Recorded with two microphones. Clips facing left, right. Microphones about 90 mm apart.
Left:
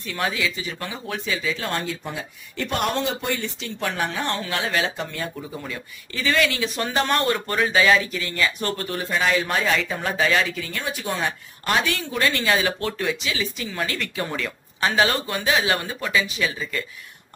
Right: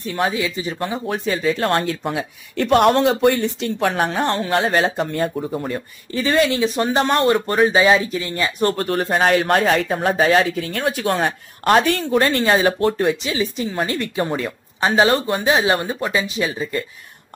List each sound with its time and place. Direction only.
0.0 s a woman's voice: 30° right (ahead or behind)
1.2 s speech: 55° right (ahead or behind)
6.1 s a woman's voice: 30° right (ahead or behind)
7.6 s speech: 25° right (ahead or behind)
8.9 s speech: 55° right (ahead or behind)
10.5 s speech: 55° right (ahead or behind)
11.6 s speech: 45° right (ahead or behind)
12.3 s a woman's voice: 25° right (ahead or behind)